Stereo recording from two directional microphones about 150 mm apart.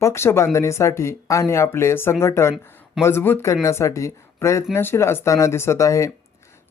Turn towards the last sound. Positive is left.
turn(degrees=20)  # may be behind; listen again after turning